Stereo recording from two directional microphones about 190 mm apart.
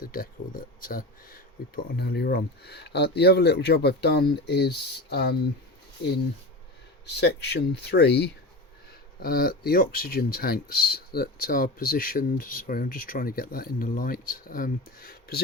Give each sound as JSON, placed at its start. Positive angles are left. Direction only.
{"t": 0.0, "sound": "speech", "side_deg": 50}
{"t": 7.0, "sound": "speech", "side_deg": 60}